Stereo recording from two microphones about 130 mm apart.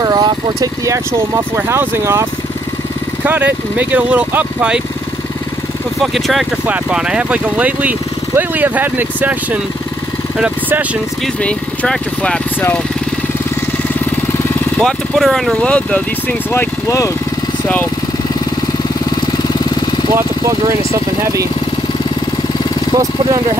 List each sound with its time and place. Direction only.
0.0 s speech: 30° right (ahead or behind)
3.3 s speech: 15° right (ahead or behind)
6.1 s speech: centre (ahead or behind)
11.4 s speech: 10° left (ahead or behind)
14.8 s speech: centre (ahead or behind)
22.9 s speech: 25° right (ahead or behind)